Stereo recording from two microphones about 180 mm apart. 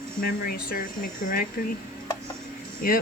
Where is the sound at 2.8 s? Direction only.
55° left (ahead or behind).